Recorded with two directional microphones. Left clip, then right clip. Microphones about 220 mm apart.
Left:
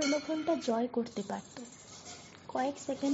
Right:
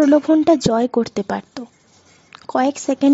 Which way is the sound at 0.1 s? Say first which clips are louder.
Right 18 dB; 55° right (ahead or behind).